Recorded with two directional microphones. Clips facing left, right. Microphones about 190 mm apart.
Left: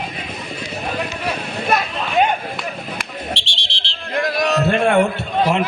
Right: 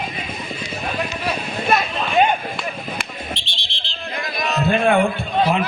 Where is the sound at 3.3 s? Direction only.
80° left.